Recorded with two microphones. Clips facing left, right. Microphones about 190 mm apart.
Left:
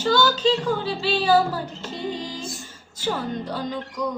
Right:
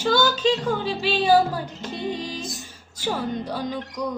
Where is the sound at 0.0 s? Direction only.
15° right (ahead or behind).